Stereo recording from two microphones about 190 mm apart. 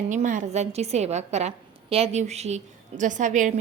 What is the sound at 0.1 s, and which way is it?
A woman's voice, 40° right (ahead or behind).